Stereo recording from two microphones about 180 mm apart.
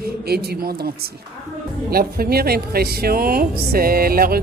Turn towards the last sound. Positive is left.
turn(degrees=-55)  # may be behind; listen again after turning